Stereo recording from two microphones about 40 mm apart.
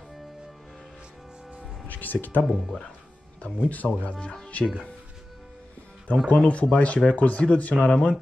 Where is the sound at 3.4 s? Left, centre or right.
Left.